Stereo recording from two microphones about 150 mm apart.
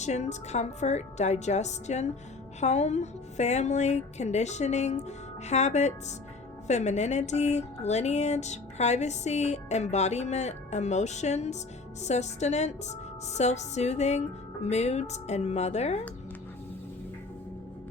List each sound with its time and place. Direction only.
0.0 s speech: 50° left (ahead or behind)